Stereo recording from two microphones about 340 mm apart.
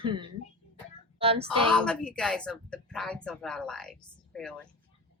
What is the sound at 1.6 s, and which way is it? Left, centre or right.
Speech, centre.